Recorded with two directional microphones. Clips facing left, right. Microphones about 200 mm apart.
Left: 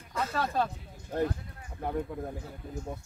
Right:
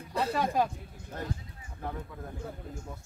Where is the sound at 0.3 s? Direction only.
15° right (ahead or behind).